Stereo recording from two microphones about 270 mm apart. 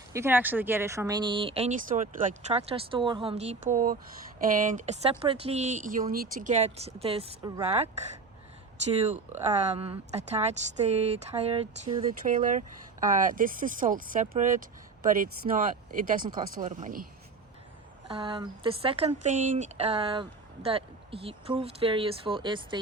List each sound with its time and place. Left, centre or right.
0.1 s speech: centre; by 7.9 s right
9.0 s speech: right
18.1 s speech: centre